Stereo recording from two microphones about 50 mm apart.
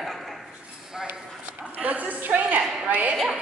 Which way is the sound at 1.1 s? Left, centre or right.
Right.